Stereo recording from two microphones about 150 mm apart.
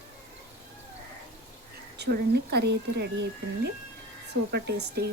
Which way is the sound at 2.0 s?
90° right.